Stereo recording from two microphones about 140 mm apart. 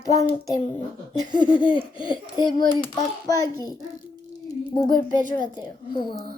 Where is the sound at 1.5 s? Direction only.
35° left (ahead or behind).